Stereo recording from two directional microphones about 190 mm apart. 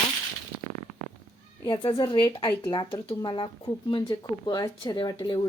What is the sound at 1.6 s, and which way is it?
Speech, 20° left (ahead or behind).